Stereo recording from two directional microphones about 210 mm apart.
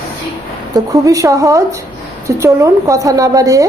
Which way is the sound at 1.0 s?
15° right (ahead or behind).